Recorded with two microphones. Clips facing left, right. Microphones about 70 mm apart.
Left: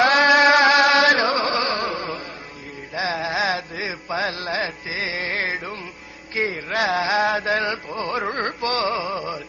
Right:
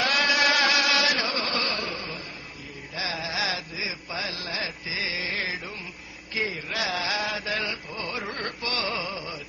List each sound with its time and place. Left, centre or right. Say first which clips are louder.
0.0 s music: left 9 dB; left
6.3 s a sound: left 6 dB; left
9.1 s music: left 8 dB; left